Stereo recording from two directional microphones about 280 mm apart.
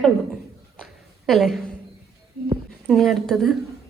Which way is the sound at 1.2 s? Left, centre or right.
Centre.